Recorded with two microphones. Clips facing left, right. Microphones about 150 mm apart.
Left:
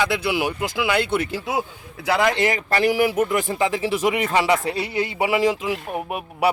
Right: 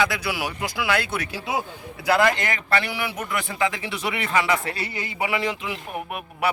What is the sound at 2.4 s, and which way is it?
Speech, 35° left (ahead or behind).